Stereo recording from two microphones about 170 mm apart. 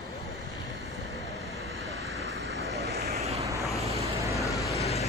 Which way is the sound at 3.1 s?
40° right (ahead or behind).